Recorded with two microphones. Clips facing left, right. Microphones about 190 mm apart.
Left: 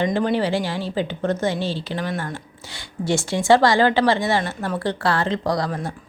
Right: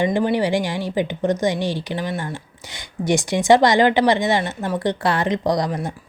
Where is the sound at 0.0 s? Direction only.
15° right (ahead or behind).